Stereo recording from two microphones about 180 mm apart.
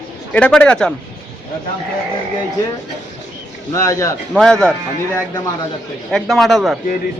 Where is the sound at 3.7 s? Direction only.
15° left (ahead or behind).